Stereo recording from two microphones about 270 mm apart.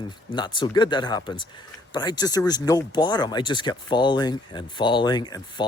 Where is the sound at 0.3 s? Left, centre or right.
Centre.